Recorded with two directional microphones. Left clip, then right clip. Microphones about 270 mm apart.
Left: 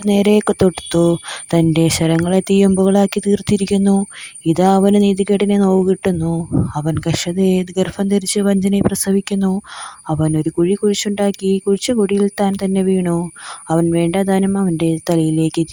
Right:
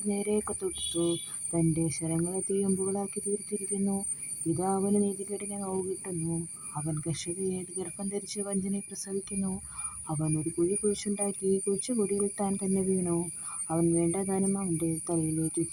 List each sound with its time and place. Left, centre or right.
0.1 s speech: left